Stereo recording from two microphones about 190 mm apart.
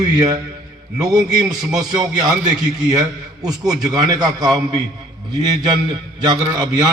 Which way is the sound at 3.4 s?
20° right (ahead or behind).